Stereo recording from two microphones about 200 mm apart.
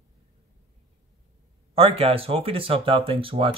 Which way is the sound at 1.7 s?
30° right (ahead or behind).